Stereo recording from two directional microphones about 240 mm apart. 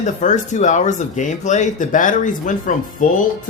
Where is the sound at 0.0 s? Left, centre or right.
Left.